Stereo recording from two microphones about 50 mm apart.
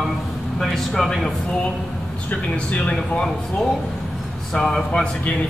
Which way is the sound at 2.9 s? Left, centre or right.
Centre.